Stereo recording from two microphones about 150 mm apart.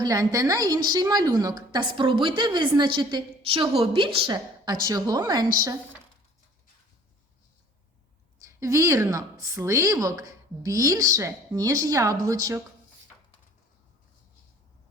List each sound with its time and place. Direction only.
0.0 s a woman's voice: 25° right (ahead or behind)
8.4 s a woman's voice: 20° right (ahead or behind)